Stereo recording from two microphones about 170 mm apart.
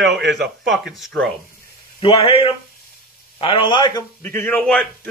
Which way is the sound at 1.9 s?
35° left (ahead or behind).